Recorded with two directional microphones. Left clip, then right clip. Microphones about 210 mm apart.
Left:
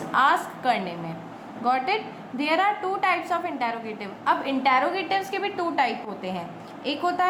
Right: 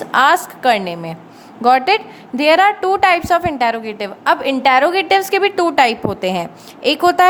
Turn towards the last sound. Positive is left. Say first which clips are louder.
# right 12 dB
turn(degrees=-55)  # may be behind; listen again after turning